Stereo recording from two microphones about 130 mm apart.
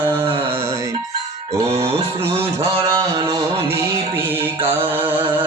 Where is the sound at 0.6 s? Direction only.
20° right (ahead or behind).